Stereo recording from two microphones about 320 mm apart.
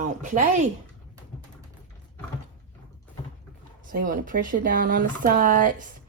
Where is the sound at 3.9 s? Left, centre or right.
Right.